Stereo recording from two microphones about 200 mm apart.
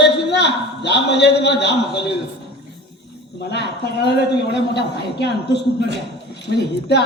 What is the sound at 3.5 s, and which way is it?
A man's voice, 60° left (ahead or behind).